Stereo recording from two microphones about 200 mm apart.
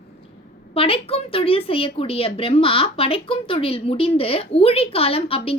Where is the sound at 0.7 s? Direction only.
30° left (ahead or behind).